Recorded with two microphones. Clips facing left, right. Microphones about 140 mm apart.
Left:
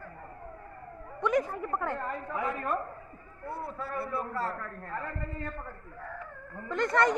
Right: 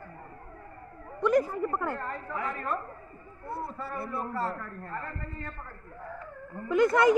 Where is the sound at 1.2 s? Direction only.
Centre (ahead or behind).